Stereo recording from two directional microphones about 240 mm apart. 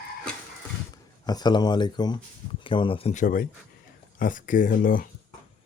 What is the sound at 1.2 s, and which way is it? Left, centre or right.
Speech, centre.